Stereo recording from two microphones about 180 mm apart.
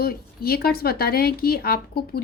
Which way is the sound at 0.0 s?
55° left (ahead or behind).